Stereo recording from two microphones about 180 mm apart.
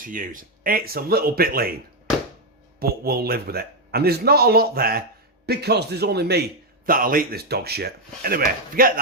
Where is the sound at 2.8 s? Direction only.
60° right (ahead or behind).